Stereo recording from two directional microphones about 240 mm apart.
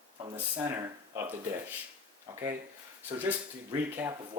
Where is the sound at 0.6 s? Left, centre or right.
Centre.